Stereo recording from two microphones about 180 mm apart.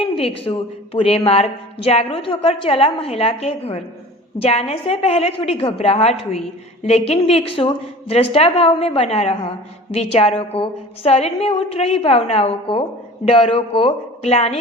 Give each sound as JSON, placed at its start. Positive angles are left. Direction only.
{"t": 0.2, "sound": "a woman's voice", "side_deg": 30}